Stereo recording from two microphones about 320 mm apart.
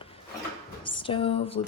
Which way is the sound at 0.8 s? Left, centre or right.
Centre.